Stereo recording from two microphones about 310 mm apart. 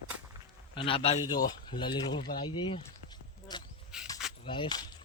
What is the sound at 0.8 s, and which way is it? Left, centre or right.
Speech, centre.